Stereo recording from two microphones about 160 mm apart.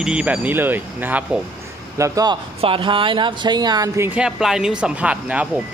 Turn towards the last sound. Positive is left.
turn(degrees=-10)  # may be behind; listen again after turning